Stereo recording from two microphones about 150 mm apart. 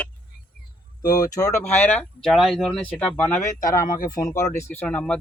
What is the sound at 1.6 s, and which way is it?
Speech, 10° left (ahead or behind).